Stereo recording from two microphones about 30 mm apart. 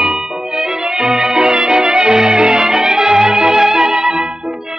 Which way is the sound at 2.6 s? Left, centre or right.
Right.